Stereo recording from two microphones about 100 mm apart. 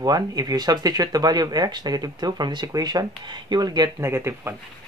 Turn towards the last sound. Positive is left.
turn(degrees=-25)  # may be behind; listen again after turning